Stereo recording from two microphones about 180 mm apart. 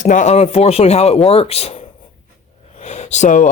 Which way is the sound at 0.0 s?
45° left (ahead or behind).